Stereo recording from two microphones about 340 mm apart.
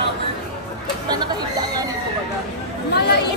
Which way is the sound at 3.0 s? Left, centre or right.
Left.